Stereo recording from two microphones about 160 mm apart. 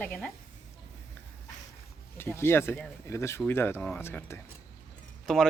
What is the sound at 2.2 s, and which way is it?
Speech, 15° left (ahead or behind).